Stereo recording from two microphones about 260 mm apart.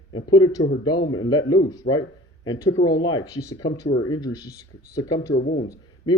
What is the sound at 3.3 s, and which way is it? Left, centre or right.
Speech, left.